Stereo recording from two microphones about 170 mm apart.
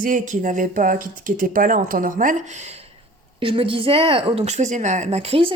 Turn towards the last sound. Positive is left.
turn(degrees=-35)  # may be behind; listen again after turning